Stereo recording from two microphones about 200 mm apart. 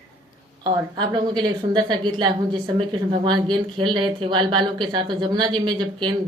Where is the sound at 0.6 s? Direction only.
20° right (ahead or behind).